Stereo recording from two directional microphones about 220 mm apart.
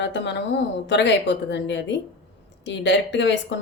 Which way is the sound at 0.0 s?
55° left (ahead or behind).